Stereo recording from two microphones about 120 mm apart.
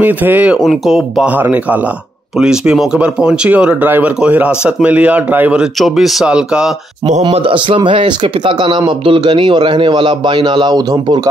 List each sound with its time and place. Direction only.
0.0 s speech: 15° right (ahead or behind)
0.6 s speech: centre (ahead or behind)
1.3 s speech: 15° right (ahead or behind)
5.8 s speech: centre (ahead or behind)
7.3 s speech: 45° right (ahead or behind)